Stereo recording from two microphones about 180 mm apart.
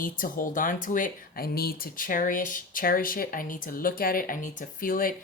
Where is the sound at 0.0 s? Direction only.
50° left (ahead or behind).